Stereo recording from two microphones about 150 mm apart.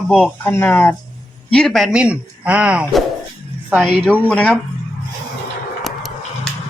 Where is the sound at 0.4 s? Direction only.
15° left (ahead or behind); by 3.0 s 5° right (ahead or behind).